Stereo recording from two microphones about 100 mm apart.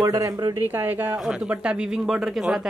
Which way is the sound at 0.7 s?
20° right (ahead or behind).